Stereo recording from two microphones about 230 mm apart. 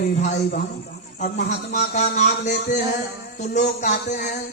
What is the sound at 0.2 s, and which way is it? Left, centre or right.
A man's voice, left.